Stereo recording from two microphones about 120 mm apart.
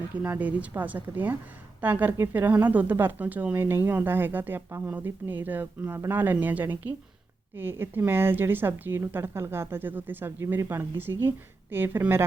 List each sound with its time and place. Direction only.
0.2 s speech: 15° right (ahead or behind)